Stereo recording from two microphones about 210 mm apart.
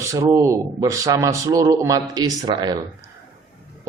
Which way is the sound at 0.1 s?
15° right (ahead or behind).